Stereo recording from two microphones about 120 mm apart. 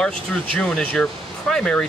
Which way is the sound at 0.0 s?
5° left (ahead or behind).